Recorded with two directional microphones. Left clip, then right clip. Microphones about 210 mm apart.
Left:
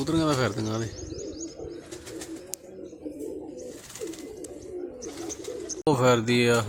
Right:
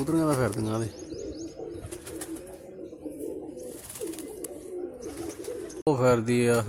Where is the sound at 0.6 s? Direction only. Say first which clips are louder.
Even; centre (ahead or behind).